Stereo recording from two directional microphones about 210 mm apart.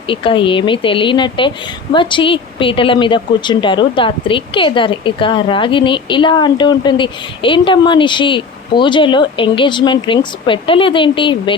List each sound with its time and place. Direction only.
0.1 s a woman's voice: 25° left (ahead or behind)